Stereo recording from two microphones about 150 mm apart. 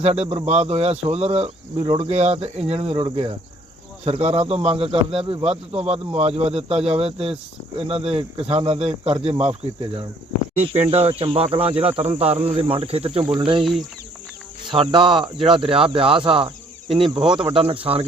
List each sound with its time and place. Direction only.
0.0 s speech: 45° right (ahead or behind)
14.7 s speech: 35° right (ahead or behind)